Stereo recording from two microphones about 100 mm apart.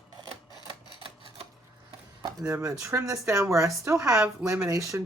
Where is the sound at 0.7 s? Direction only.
60° right (ahead or behind).